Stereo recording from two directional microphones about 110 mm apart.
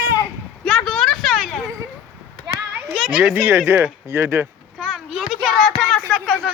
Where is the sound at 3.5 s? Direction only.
20° right (ahead or behind).